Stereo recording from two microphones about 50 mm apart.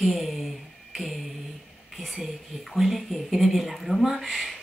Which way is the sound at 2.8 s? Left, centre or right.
Centre.